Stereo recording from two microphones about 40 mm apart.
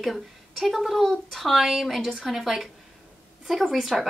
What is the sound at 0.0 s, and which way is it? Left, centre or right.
A woman's voice, centre.